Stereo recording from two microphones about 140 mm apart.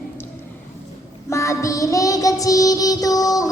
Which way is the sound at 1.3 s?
20° left (ahead or behind).